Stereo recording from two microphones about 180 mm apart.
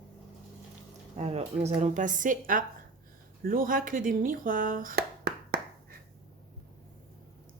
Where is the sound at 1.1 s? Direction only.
35° right (ahead or behind); by 5.6 s 60° right (ahead or behind).